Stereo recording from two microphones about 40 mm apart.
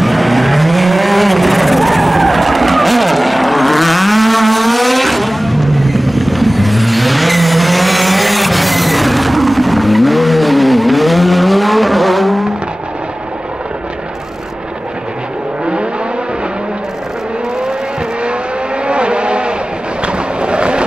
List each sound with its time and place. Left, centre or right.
0.0 s vehicle: centre
18.9 s vehicle: right
20.0 s a sound: right